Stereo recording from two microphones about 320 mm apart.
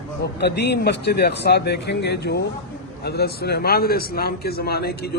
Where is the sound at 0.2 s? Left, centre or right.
Left.